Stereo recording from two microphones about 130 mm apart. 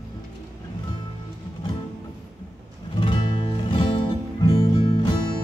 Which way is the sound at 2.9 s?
40° left (ahead or behind).